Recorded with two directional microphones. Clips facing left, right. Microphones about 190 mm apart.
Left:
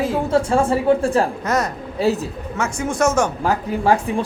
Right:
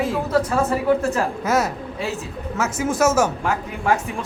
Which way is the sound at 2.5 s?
5° right (ahead or behind).